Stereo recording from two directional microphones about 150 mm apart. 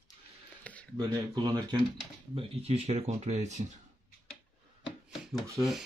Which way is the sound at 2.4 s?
45° right (ahead or behind).